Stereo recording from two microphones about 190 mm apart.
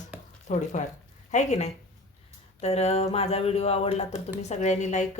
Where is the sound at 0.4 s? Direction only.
40° left (ahead or behind).